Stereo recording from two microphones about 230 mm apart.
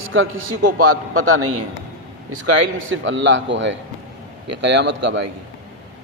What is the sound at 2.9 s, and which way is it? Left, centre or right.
Speech, right.